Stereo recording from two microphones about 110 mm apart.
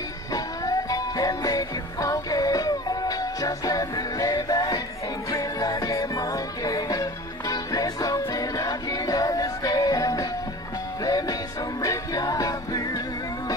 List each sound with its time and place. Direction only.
0.3 s music: 35° left (ahead or behind)